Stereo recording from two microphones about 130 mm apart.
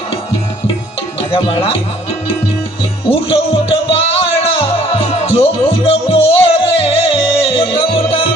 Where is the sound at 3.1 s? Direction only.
45° left (ahead or behind).